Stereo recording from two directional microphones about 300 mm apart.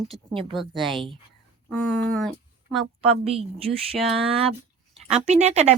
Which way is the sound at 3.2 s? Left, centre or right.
Centre.